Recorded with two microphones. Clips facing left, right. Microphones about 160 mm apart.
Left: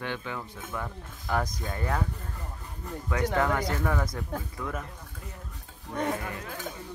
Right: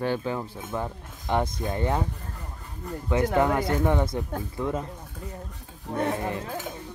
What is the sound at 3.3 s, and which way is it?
Speech, 20° right (ahead or behind).